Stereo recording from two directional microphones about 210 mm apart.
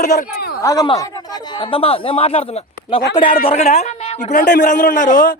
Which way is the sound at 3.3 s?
45° left (ahead or behind).